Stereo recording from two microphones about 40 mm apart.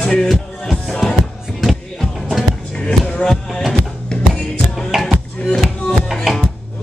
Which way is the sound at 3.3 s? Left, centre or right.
Centre.